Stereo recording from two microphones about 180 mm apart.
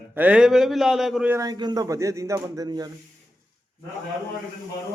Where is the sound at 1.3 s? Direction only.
20° right (ahead or behind).